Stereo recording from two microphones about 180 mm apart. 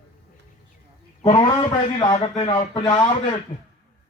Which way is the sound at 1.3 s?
25° left (ahead or behind).